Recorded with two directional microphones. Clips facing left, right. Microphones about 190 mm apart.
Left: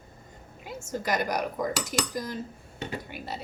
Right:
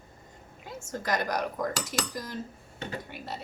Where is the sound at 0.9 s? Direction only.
5° left (ahead or behind).